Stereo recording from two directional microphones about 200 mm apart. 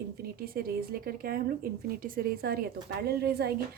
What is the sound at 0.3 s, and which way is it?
A woman's voice, 50° right (ahead or behind).